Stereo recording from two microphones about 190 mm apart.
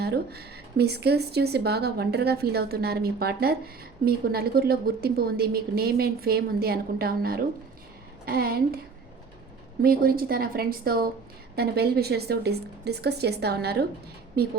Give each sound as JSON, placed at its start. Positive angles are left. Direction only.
{"t": 0.0, "sound": "a woman's voice", "side_deg": -55}
{"t": 9.8, "sound": "a woman's voice", "side_deg": -50}